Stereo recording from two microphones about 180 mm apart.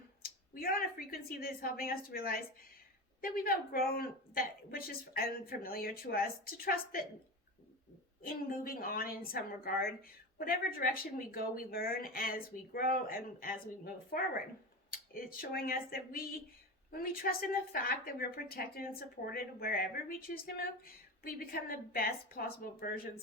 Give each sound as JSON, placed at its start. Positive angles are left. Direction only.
{"t": 0.2, "sound": "a woman's voice", "side_deg": 55}
{"t": 8.2, "sound": "a woman's voice", "side_deg": 50}